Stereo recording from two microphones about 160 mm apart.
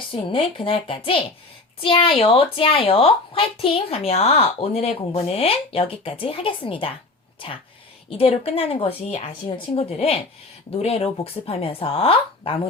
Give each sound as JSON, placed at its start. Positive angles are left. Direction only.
{"t": 0.1, "sound": "speech", "side_deg": 35}
{"t": 8.2, "sound": "speech", "side_deg": 35}